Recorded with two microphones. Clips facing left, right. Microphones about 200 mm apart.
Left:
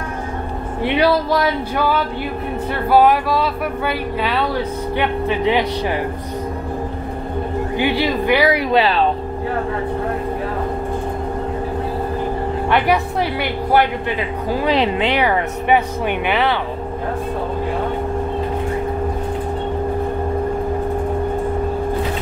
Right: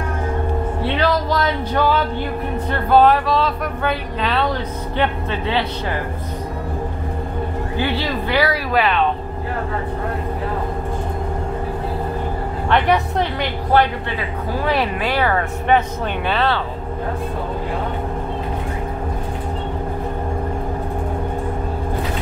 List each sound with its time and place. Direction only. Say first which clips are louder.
0.8 s speech: left 4 dB; 10° left (ahead or behind)
7.7 s speech: left 4 dB; 15° left (ahead or behind)
8.7 s speech: even; 30° left (ahead or behind)
12.6 s speech: right 1 dB; 5° left (ahead or behind)